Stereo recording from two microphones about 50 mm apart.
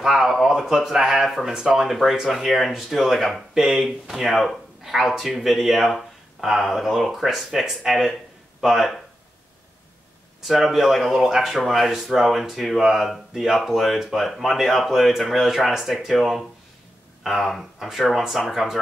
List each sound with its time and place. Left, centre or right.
0.0 s speech: centre
10.4 s speech: centre